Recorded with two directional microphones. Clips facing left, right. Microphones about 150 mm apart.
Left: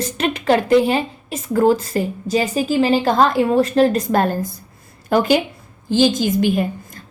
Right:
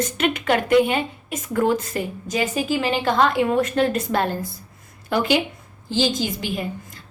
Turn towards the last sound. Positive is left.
turn(degrees=50)  # may be behind; listen again after turning